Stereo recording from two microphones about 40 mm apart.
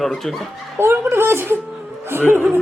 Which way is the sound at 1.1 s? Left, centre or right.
Right.